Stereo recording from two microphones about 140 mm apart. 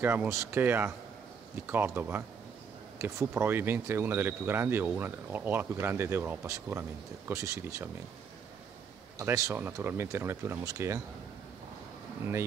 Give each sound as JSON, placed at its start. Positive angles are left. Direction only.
{"t": 0.0, "sound": "speech", "side_deg": -15}
{"t": 9.2, "sound": "speech", "side_deg": -20}